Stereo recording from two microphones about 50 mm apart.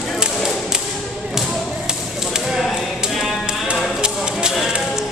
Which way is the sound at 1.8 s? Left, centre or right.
Centre.